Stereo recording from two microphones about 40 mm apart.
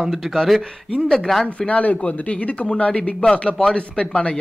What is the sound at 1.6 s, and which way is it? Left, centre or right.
Speech, left.